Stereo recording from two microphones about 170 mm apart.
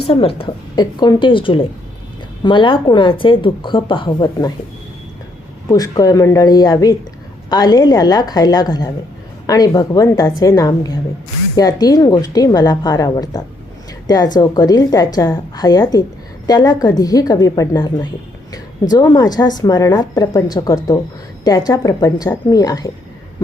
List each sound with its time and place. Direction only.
0.1 s a woman's voice: 35° left (ahead or behind)
5.6 s a woman's voice: 20° left (ahead or behind)